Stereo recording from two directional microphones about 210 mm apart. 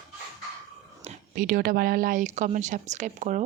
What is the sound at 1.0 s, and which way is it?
Speech, 40° right (ahead or behind).